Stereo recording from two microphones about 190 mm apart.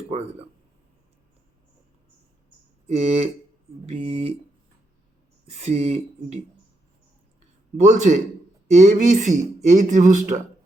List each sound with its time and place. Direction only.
2.9 s speech: 35° right (ahead or behind)
5.5 s speech: 35° right (ahead or behind)
7.8 s speech: 40° right (ahead or behind)